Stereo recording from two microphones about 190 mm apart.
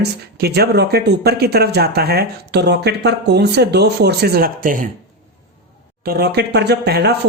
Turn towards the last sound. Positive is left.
turn(degrees=-60)  # may be behind; listen again after turning